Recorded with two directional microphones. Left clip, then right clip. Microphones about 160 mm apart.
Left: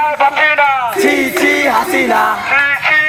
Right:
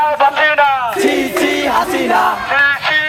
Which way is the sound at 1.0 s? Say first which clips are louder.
Left 2 dB; 25° left (ahead or behind).